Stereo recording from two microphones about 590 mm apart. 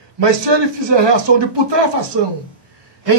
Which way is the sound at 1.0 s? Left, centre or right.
Right.